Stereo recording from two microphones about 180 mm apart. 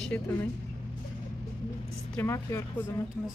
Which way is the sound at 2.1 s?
15° left (ahead or behind).